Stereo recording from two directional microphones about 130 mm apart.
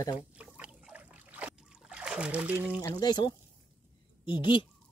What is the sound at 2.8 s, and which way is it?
Speech, 30° left (ahead or behind).